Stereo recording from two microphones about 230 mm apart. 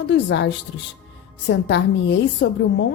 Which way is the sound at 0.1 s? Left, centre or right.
Left.